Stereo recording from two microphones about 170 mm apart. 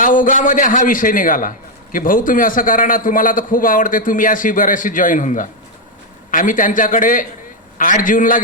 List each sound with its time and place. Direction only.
0.0 s a man's voice: 50° left (ahead or behind)